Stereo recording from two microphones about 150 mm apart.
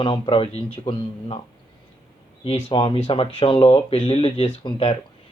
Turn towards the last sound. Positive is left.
turn(degrees=40)  # may be behind; listen again after turning